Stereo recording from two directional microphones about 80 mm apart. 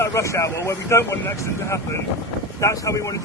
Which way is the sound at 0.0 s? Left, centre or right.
Left.